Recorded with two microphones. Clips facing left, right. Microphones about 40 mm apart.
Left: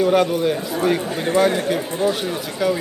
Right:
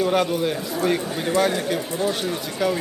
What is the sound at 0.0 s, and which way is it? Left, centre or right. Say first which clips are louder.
Speech: left 4 dB; centre.